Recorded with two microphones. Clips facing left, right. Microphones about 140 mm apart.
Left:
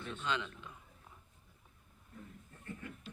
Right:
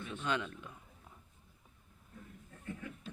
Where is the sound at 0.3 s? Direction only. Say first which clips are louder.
Right 2 dB; 50° right (ahead or behind).